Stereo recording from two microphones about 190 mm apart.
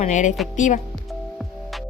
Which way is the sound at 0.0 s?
40° left (ahead or behind).